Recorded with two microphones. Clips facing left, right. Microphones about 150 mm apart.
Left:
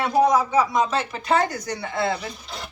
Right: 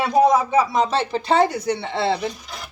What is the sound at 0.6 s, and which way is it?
Speech, 30° right (ahead or behind).